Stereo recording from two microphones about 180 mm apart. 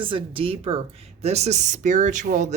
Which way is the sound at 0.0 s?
30° right (ahead or behind).